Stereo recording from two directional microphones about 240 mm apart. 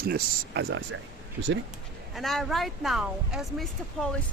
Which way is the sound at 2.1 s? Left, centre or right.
Centre.